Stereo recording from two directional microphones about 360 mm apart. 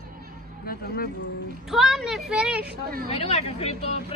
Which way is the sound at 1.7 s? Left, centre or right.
Centre.